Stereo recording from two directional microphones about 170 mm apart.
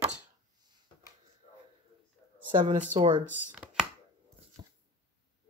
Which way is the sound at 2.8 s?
45° right (ahead or behind).